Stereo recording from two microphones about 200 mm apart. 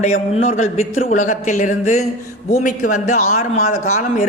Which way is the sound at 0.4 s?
35° left (ahead or behind).